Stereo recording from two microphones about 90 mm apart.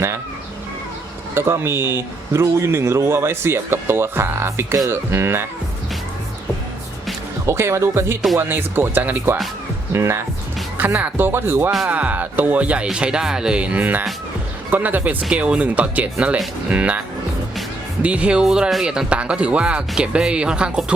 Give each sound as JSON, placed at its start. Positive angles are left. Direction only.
{"t": 1.3, "sound": "a man's voice", "side_deg": -30}
{"t": 7.4, "sound": "a man's voice", "side_deg": -30}
{"t": 10.8, "sound": "a man's voice", "side_deg": -15}
{"t": 18.0, "sound": "speech", "side_deg": -15}